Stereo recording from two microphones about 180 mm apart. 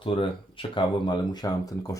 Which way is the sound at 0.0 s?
30° left (ahead or behind).